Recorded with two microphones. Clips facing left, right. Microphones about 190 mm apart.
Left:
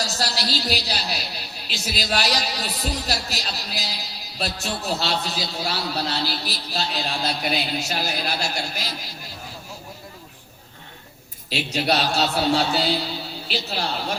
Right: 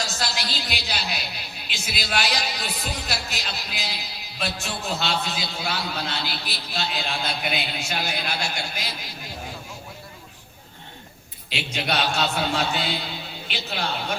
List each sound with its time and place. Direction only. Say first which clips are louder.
0.0 s a woman's voice: left 3 dB; 40° left (ahead or behind)
11.4 s a woman's voice: left 5 dB; 40° left (ahead or behind)